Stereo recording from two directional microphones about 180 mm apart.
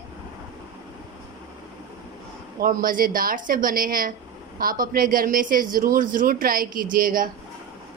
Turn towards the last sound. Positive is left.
turn(degrees=-50)  # may be behind; listen again after turning